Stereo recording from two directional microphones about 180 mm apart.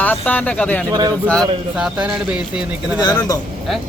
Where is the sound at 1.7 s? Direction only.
5° right (ahead or behind).